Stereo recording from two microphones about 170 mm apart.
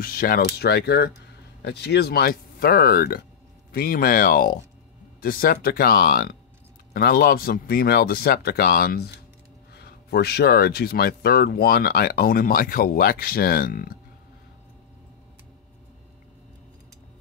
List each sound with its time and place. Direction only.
0.0 s speech: 60° left (ahead or behind)
0.6 s speech: 70° left (ahead or behind)